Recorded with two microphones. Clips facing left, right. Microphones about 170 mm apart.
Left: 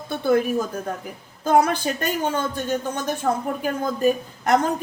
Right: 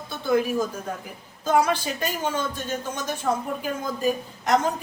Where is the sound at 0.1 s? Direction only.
55° left (ahead or behind).